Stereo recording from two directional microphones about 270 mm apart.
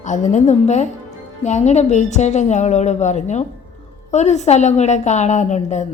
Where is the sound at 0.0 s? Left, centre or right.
Left.